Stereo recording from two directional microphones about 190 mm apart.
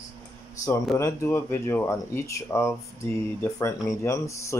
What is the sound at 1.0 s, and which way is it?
Speech, 15° left (ahead or behind).